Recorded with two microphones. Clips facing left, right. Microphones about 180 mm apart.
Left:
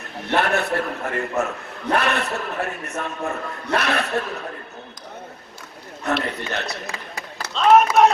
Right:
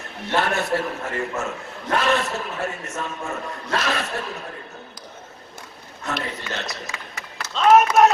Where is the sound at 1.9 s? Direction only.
60° left (ahead or behind).